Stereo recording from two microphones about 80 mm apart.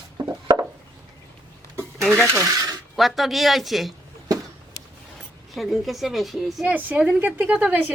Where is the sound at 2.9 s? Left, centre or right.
Centre.